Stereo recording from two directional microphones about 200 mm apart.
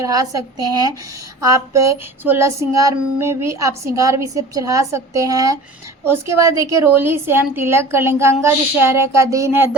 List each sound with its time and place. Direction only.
0.0 s a woman's voice: 15° right (ahead or behind)